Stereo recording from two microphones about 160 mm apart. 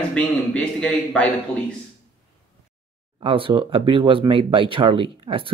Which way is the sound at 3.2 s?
35° right (ahead or behind).